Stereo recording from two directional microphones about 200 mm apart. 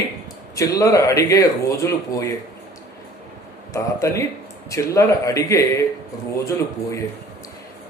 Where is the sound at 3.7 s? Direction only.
15° left (ahead or behind).